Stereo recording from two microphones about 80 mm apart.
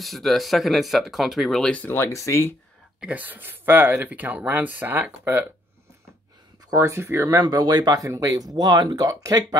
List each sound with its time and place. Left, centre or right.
0.0 s speech: centre
1.6 s speech: centre
2.1 s speech: left
3.0 s speech: centre
6.7 s speech: right
7.4 s speech: right
9.1 s speech: right